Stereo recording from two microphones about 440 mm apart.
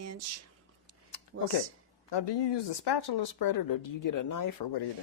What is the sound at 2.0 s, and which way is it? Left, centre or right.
Speech, left.